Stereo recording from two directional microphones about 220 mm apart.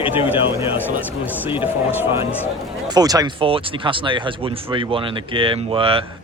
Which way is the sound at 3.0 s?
15° right (ahead or behind).